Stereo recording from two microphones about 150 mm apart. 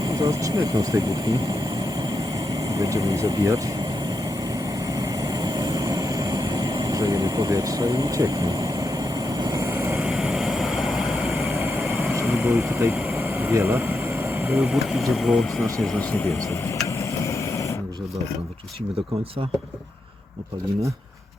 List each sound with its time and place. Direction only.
0.0 s speech: 25° right (ahead or behind)
2.7 s speech: 25° right (ahead or behind)
4.9 s vehicle: 25° right (ahead or behind); by 11.4 s centre (ahead or behind)
12.1 s speech: 15° right (ahead or behind)
13.1 s vehicle: 15° right (ahead or behind)
15.1 s speech: centre (ahead or behind)
16.8 s vehicle: 20° left (ahead or behind)